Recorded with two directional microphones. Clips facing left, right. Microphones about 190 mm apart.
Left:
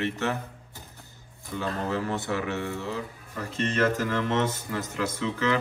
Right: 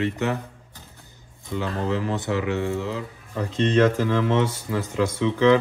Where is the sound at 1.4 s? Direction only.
20° right (ahead or behind).